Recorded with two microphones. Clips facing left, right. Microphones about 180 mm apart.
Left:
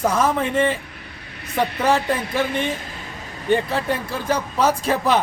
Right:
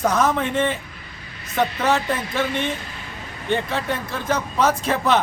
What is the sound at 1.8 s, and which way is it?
Speech, 10° left (ahead or behind).